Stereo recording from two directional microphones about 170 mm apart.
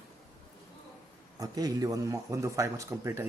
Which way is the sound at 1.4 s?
20° right (ahead or behind).